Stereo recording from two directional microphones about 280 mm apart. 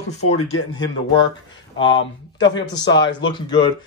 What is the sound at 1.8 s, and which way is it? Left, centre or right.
Speech, left.